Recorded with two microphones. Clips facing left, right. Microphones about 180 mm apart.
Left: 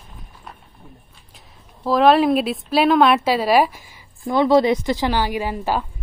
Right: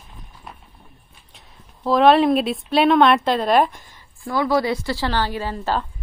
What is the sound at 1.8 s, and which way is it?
A woman's voice, centre (ahead or behind).